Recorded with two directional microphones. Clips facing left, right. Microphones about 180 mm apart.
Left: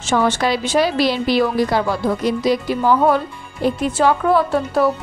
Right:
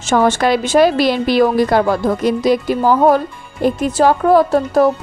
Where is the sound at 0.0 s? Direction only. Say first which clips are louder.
Right 4 dB; 45° right (ahead or behind).